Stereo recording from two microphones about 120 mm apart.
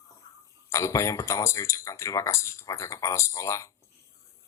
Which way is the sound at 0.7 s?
25° left (ahead or behind).